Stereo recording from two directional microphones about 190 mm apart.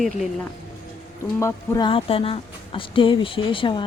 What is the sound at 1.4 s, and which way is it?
A woman's voice, 25° left (ahead or behind).